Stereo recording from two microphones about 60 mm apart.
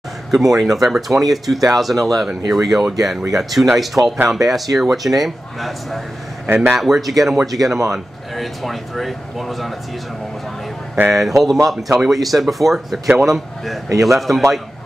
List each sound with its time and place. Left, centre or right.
0.3 s speech: centre
6.4 s a man's voice: right
6.8 s speech: centre
11.1 s speech: centre